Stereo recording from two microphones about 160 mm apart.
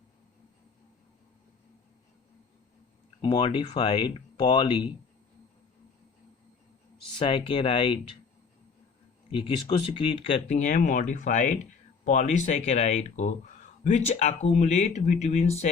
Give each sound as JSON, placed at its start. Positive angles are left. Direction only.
{"t": 3.2, "sound": "speech", "side_deg": 30}
{"t": 7.2, "sound": "speech", "side_deg": 30}
{"t": 9.3, "sound": "speech", "side_deg": 30}
{"t": 10.6, "sound": "speech", "side_deg": 50}